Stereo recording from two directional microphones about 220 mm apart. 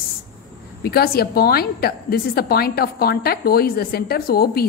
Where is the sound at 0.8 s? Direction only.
45° left (ahead or behind).